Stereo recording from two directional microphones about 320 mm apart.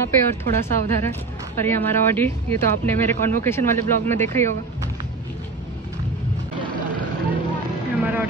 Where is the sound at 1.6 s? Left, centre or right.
Centre.